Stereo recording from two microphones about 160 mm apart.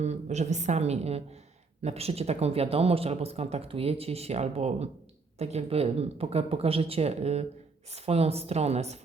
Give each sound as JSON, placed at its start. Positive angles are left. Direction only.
{"t": 0.0, "sound": "a woman's voice", "side_deg": -45}